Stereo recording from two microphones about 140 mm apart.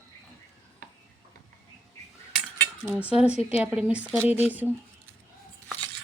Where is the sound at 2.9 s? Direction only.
10° right (ahead or behind).